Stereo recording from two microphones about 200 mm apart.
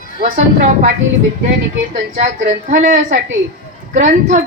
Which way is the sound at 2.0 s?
40° right (ahead or behind).